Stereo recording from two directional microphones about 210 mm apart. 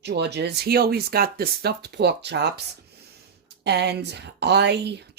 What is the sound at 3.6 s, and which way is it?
Speech, 55° right (ahead or behind).